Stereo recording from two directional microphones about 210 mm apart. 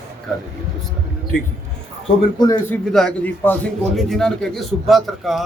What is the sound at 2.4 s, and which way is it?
A man's voice, 15° left (ahead or behind).